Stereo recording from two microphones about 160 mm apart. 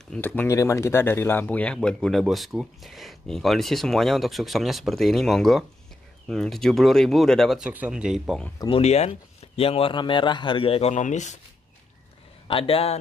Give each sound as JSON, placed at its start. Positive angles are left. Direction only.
{"t": 0.1, "sound": "speech", "side_deg": 10}
{"t": 8.6, "sound": "speech", "side_deg": 40}
{"t": 12.4, "sound": "speech", "side_deg": 35}